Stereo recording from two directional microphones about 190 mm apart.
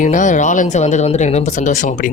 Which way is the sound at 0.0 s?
40° left (ahead or behind).